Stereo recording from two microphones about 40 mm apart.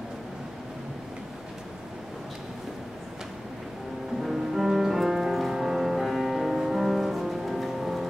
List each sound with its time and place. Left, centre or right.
4.2 s music: centre